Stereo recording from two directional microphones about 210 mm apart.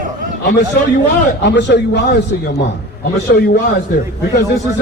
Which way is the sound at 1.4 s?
55° left (ahead or behind).